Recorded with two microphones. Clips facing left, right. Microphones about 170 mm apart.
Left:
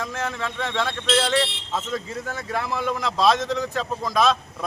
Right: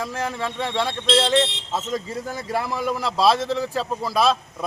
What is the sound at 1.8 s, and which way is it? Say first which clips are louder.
Speech: right 2 dB; 35° right (ahead or behind).